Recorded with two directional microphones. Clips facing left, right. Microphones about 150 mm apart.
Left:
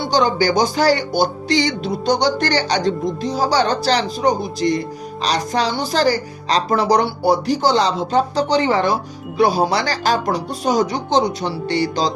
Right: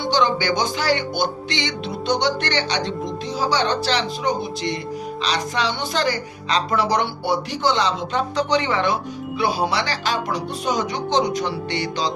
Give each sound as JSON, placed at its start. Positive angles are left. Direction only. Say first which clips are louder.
{"t": 0.1, "sound": "speech", "louder": "left 3 dB", "side_deg": 40}